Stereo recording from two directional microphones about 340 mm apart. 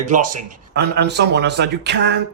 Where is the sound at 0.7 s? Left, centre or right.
Right.